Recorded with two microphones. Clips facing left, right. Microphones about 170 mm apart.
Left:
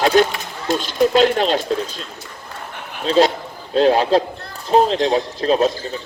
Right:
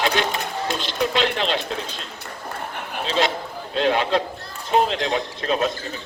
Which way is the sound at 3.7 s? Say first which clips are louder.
Left 6 dB; 35° left (ahead or behind).